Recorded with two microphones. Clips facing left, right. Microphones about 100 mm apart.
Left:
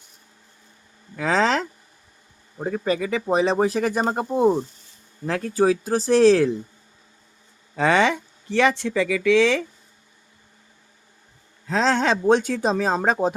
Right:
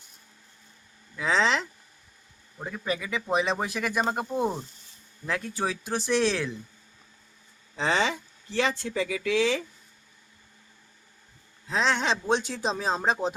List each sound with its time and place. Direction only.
1.1 s a sound: 45° left (ahead or behind)
2.6 s speech: 40° left (ahead or behind)
5.2 s speech: 45° left (ahead or behind)
7.8 s speech: 60° left (ahead or behind)
11.7 s speech: 40° left (ahead or behind)